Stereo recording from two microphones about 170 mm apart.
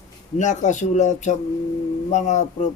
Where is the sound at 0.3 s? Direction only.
45° left (ahead or behind).